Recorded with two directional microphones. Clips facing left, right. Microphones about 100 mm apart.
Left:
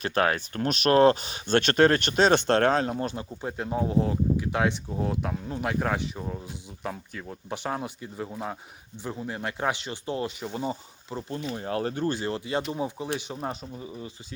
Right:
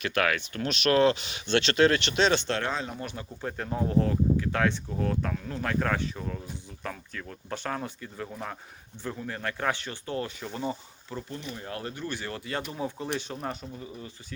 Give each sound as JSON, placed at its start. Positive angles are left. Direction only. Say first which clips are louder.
{"t": 0.0, "sound": "speech", "louder": "left 2 dB", "side_deg": 35}
{"t": 3.4, "sound": "speech", "louder": "left 2 dB", "side_deg": 15}